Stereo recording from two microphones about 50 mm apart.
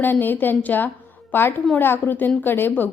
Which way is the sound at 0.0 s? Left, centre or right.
Left.